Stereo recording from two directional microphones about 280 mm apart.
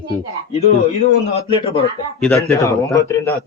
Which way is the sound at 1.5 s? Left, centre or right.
Centre.